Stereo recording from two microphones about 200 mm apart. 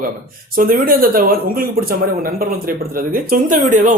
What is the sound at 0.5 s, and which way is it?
Speech, 45° right (ahead or behind).